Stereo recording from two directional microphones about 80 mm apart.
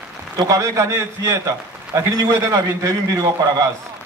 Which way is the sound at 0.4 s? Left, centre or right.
Right.